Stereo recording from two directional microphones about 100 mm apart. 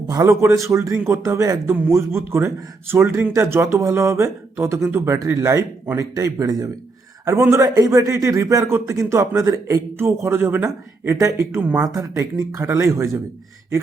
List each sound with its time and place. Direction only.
0.1 s a man's voice: 30° right (ahead or behind)
11.6 s speech: 15° right (ahead or behind)
11.9 s speech: 30° right (ahead or behind)